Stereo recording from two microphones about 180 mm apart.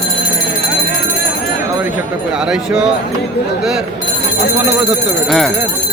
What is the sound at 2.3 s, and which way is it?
Speech, 5° right (ahead or behind).